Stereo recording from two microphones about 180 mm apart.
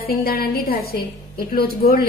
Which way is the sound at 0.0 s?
55° left (ahead or behind).